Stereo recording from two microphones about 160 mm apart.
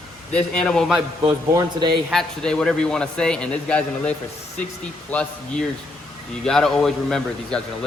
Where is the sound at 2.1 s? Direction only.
5° left (ahead or behind).